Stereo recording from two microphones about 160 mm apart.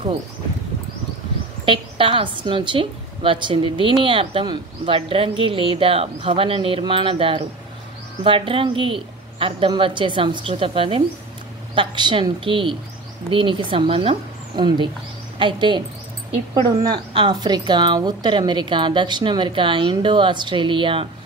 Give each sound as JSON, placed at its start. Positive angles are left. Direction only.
{"t": 1.7, "sound": "a woman's voice", "side_deg": -35}
{"t": 16.8, "sound": "speech", "side_deg": -30}